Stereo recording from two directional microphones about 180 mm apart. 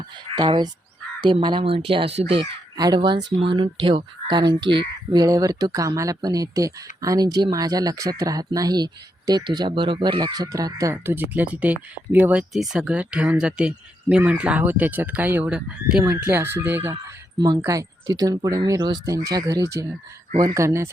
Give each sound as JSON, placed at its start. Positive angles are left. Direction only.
{"t": 0.3, "sound": "speech", "side_deg": -25}